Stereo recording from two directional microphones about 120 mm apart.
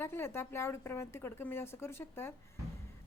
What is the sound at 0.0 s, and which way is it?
A woman's voice, 20° left (ahead or behind).